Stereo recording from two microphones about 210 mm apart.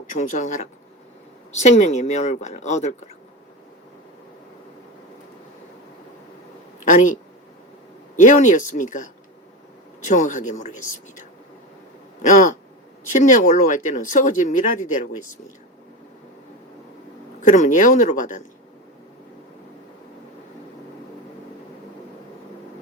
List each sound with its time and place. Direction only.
0.1 s speech: 35° left (ahead or behind)
6.8 s speech: 35° left (ahead or behind)
8.2 s speech: 35° left (ahead or behind)
12.2 s speech: 35° left (ahead or behind)
17.5 s speech: 35° left (ahead or behind)